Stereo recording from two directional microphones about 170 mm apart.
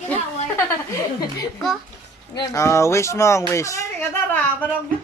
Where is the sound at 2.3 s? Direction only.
20° left (ahead or behind).